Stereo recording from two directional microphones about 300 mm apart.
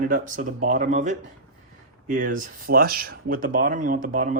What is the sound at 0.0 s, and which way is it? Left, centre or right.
Speech, right.